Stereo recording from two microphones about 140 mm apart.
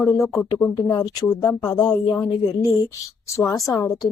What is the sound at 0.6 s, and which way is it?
Speech, 15° left (ahead or behind).